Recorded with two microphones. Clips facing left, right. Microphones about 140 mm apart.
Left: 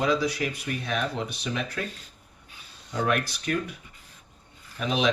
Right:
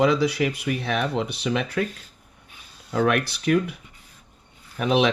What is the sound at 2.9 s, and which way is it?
Speech, 60° right (ahead or behind).